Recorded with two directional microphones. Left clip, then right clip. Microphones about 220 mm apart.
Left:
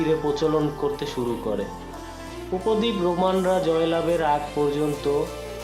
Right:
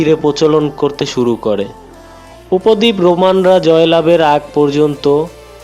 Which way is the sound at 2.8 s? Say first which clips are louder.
Right 12 dB; 40° right (ahead or behind).